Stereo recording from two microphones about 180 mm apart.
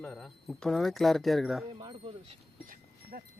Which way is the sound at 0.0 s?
5° left (ahead or behind).